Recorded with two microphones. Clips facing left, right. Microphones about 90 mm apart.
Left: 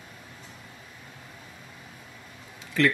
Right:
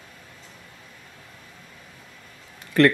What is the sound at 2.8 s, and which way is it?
Speech, 55° right (ahead or behind).